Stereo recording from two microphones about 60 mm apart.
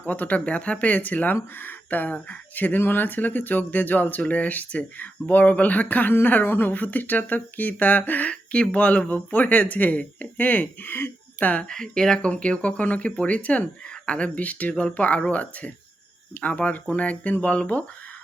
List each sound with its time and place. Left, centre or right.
0.0 s speech: left
11.7 s speech: centre